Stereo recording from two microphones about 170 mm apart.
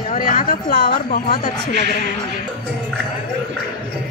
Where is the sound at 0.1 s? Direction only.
50° left (ahead or behind).